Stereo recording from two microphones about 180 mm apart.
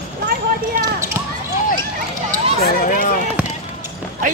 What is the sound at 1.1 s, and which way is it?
Basketball bounce, 15° right (ahead or behind).